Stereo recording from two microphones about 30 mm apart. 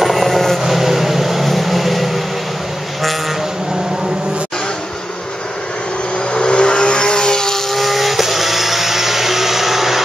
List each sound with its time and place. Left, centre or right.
0.0 s train: centre
0.6 s vehicle: centre
6.1 s vehicle: left
7.7 s vehicle: centre